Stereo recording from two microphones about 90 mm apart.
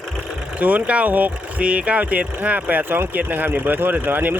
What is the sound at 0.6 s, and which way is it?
Speech, 15° right (ahead or behind).